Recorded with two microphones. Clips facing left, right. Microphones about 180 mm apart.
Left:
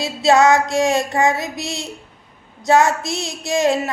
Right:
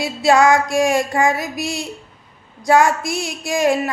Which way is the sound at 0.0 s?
25° left (ahead or behind).